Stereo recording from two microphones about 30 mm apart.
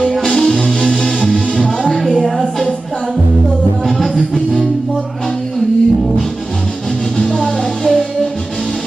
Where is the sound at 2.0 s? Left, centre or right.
Centre.